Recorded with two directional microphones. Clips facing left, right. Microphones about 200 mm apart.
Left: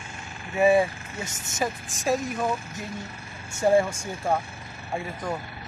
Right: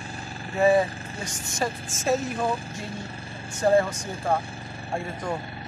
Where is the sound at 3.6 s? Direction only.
10° left (ahead or behind).